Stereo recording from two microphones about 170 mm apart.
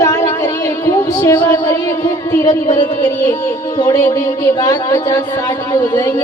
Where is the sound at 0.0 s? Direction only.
20° left (ahead or behind).